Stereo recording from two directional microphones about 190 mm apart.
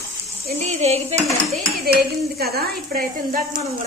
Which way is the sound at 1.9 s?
55° right (ahead or behind).